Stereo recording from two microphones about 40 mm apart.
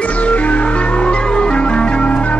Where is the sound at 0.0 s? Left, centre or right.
Left.